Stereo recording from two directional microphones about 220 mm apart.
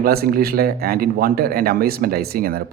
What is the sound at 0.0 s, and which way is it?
Speech, 45° right (ahead or behind).